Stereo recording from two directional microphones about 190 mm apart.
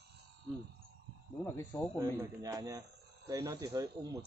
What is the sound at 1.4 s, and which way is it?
Speech, 10° left (ahead or behind).